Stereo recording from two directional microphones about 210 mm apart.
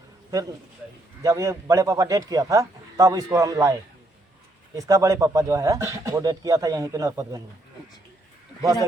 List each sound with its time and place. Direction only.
1.2 s speech: 15° right (ahead or behind)